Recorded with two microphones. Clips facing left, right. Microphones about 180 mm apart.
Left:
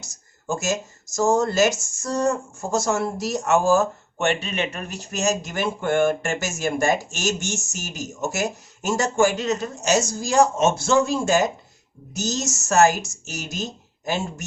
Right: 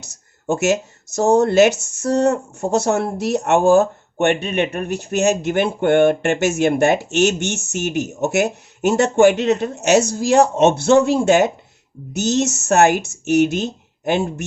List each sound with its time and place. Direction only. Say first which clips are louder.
0.0 s speech: right 8 dB; 65° right (ahead or behind)